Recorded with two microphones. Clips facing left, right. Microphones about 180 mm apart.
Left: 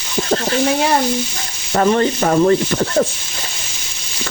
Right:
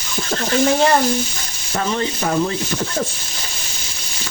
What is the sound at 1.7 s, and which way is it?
Sizzle, 60° left (ahead or behind).